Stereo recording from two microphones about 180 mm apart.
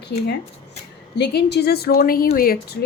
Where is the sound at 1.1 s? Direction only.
70° left (ahead or behind).